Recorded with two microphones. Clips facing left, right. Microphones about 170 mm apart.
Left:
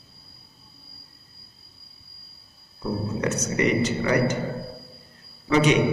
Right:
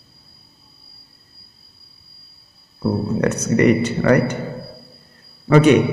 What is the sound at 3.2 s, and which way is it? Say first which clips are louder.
Speech: right 7 dB; 60° right (ahead or behind).